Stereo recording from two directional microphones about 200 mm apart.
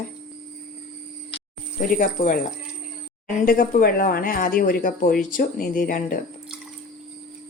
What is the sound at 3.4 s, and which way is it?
Speech, 45° left (ahead or behind).